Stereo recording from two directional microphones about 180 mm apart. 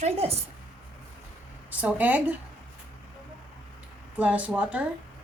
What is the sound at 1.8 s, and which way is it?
Speech, 10° right (ahead or behind).